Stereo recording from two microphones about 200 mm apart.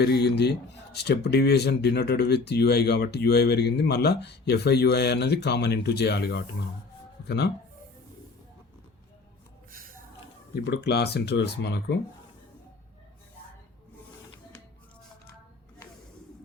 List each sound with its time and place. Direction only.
0.0 s speech: 55° left (ahead or behind)
10.7 s speech: 55° left (ahead or behind)